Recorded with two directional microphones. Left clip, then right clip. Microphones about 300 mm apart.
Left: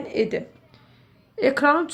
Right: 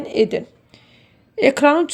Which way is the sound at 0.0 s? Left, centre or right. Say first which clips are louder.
Right 6 dB; right.